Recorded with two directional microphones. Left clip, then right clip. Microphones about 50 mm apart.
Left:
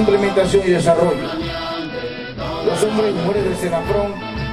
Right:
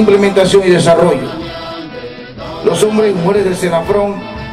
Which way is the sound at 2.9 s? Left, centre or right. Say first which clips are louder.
Right 6 dB; centre.